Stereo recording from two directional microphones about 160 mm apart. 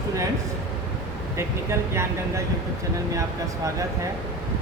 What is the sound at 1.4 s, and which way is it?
Speech, 15° right (ahead or behind).